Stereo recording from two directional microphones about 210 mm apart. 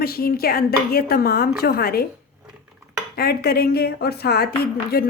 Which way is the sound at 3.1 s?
45° left (ahead or behind).